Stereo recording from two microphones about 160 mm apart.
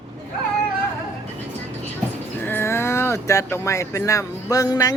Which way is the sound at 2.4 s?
15° left (ahead or behind).